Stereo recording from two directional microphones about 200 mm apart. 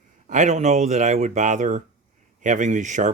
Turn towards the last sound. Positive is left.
turn(degrees=-35)  # may be behind; listen again after turning